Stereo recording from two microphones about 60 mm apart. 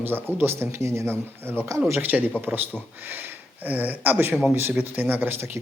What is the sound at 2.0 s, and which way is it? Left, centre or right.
Speech, right.